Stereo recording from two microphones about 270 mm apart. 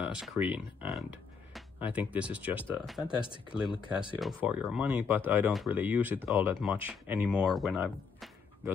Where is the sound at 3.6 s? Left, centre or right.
Centre.